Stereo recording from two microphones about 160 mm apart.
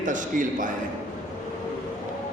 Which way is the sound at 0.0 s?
55° right (ahead or behind).